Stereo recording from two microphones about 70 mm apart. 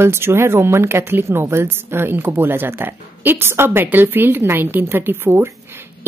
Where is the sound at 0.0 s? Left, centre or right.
Right.